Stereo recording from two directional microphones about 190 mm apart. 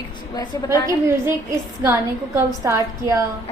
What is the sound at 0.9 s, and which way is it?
A woman's voice, 15° right (ahead or behind).